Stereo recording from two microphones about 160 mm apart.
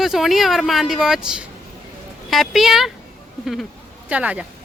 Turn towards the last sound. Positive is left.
turn(degrees=-10)  # may be behind; listen again after turning